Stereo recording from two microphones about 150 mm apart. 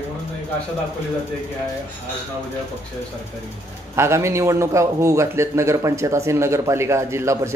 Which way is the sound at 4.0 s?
20° right (ahead or behind).